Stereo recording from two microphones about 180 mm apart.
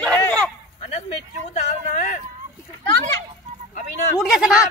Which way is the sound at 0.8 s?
40° left (ahead or behind).